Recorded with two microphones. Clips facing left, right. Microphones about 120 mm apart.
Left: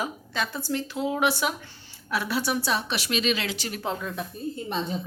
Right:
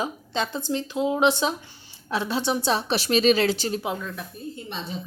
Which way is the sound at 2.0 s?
25° right (ahead or behind).